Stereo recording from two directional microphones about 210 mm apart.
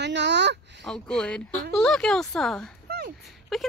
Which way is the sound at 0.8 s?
5° left (ahead or behind).